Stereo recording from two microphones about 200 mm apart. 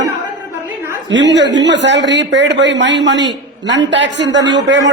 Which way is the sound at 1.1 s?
60° right (ahead or behind).